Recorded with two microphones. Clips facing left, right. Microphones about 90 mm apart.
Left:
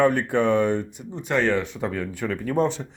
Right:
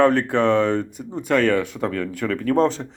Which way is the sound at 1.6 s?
70° right (ahead or behind).